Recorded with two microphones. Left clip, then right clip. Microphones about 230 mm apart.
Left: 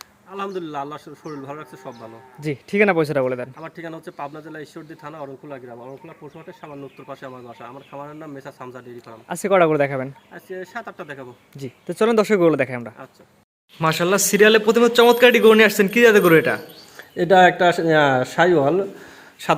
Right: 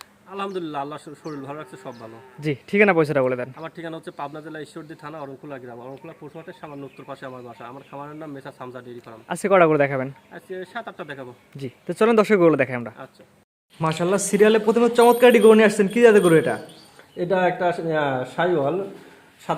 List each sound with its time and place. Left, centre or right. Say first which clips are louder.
0.3 s a man's voice: even; centre
17.2 s speech: left 8 dB; left